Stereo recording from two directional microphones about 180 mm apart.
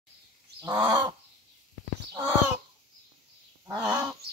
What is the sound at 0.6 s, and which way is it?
Fowl, 20° right (ahead or behind).